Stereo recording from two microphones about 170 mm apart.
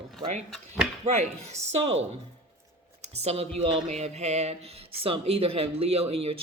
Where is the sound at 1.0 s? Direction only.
40° right (ahead or behind).